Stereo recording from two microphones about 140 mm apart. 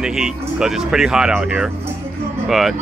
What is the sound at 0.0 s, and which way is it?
Speech, 5° right (ahead or behind).